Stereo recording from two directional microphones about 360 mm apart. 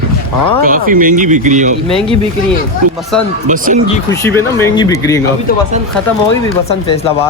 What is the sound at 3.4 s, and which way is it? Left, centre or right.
Speech, right.